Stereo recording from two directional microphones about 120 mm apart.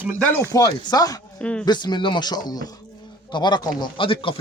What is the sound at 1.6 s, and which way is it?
Speech, 35° left (ahead or behind).